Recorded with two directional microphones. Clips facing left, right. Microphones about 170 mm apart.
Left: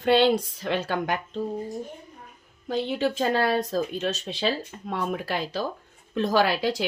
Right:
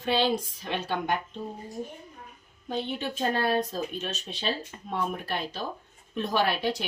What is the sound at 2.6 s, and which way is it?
Speech, 90° left.